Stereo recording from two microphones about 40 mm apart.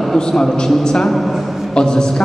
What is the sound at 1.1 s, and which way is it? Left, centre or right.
Speech, centre.